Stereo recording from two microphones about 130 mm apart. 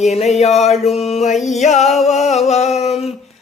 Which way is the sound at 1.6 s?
60° left (ahead or behind).